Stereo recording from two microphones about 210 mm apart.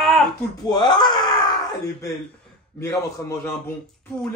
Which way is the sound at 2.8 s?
15° left (ahead or behind).